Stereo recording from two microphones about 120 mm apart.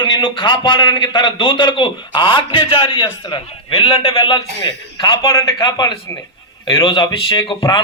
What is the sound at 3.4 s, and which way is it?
Speech, 50° left (ahead or behind).